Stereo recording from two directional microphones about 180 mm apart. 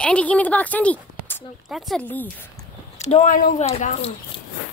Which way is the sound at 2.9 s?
40° left (ahead or behind).